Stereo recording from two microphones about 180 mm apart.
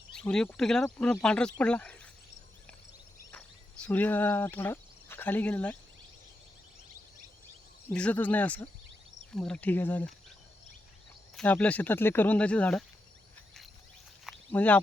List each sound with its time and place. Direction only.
0.1 s speech: 5° left (ahead or behind)
3.3 s cricket: 5° left (ahead or behind)
7.9 s speech: 10° left (ahead or behind)
11.3 s speech: 10° left (ahead or behind)
14.3 s a sound: 10° left (ahead or behind)